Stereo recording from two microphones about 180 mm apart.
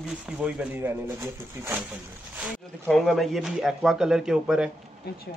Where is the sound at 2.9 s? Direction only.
Centre (ahead or behind).